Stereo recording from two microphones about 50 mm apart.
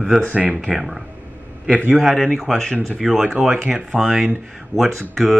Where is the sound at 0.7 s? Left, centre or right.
Centre.